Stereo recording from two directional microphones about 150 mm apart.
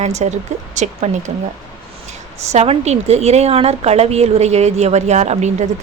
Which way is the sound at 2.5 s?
45° right (ahead or behind).